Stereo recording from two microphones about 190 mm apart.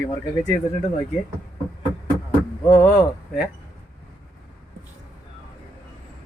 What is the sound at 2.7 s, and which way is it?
Speech, 15° left (ahead or behind).